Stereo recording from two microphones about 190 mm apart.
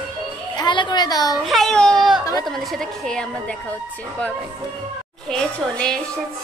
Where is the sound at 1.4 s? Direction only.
Centre (ahead or behind).